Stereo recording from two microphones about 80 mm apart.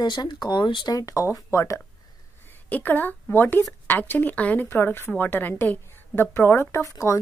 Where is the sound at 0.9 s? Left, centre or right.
Left.